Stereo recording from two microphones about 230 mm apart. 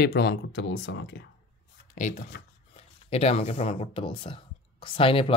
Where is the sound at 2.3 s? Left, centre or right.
Left.